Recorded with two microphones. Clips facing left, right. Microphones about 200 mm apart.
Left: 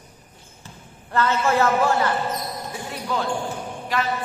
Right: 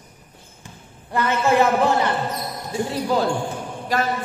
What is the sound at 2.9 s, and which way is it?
Speech, 35° right (ahead or behind).